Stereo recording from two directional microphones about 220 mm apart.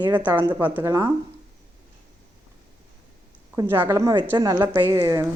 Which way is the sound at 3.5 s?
10° right (ahead or behind).